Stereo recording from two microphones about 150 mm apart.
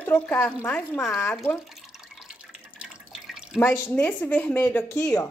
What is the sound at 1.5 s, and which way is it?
Drip, centre (ahead or behind).